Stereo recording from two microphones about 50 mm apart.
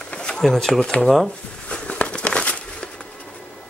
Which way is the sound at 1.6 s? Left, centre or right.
Left.